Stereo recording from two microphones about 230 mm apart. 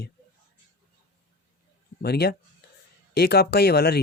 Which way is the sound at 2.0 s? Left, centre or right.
Left.